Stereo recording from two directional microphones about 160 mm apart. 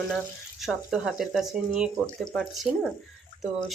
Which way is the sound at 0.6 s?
Centre (ahead or behind).